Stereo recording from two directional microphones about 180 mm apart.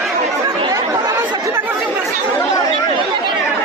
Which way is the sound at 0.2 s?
25° right (ahead or behind).